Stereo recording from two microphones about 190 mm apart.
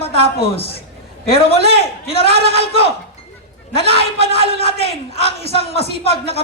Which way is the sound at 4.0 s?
30° left (ahead or behind).